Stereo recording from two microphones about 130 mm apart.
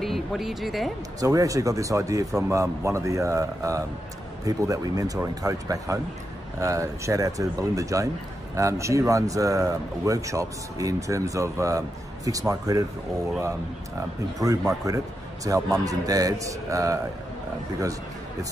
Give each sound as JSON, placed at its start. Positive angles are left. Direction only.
{"t": 0.0, "sound": "speech", "side_deg": 0}
{"t": 1.2, "sound": "speech", "side_deg": -25}